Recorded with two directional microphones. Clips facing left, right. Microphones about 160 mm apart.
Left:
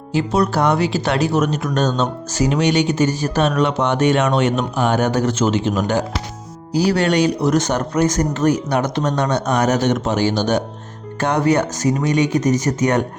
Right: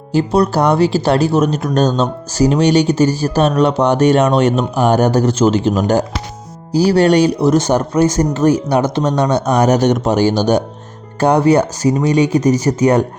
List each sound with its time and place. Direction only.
0.1 s speech: 35° right (ahead or behind)